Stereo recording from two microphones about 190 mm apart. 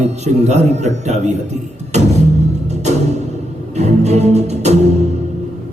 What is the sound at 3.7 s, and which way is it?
Music, 35° right (ahead or behind).